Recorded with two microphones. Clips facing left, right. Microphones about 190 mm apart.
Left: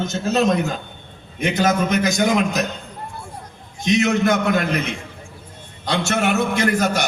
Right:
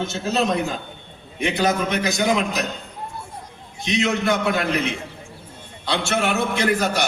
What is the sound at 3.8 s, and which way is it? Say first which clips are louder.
Speech: left 4 dB; 45° left (ahead or behind).